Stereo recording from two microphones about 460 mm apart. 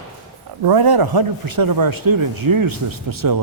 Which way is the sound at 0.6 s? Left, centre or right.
Right.